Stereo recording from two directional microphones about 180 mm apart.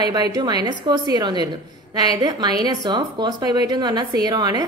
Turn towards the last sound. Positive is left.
turn(degrees=-20)  # may be behind; listen again after turning